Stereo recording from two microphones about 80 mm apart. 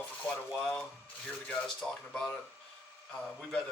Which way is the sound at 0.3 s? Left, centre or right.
Centre.